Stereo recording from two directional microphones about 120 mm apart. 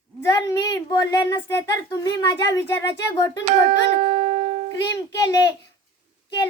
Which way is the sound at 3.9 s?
65° right (ahead or behind).